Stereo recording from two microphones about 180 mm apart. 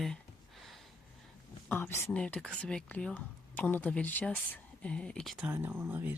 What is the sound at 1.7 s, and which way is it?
Speech, 10° left (ahead or behind).